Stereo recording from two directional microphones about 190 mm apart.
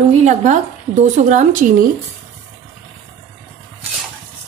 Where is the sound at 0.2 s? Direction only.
40° right (ahead or behind).